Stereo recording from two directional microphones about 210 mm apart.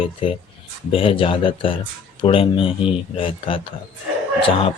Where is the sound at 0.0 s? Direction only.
25° left (ahead or behind).